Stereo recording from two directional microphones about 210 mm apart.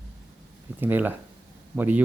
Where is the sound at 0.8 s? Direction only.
10° right (ahead or behind).